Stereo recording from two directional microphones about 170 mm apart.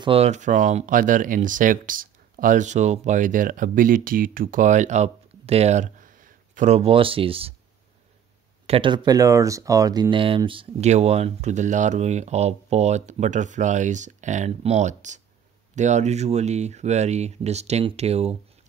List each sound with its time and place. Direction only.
0.0 s speech: 35° right (ahead or behind)
8.6 s speech: 30° right (ahead or behind)